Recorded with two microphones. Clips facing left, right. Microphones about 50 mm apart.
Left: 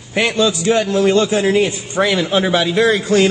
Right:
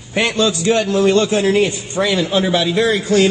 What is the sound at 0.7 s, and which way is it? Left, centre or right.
Speech, left.